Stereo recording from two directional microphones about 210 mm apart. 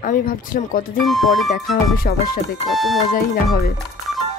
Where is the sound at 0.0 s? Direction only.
40° left (ahead or behind).